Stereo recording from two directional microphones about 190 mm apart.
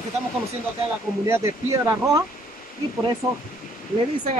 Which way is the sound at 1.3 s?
15° right (ahead or behind).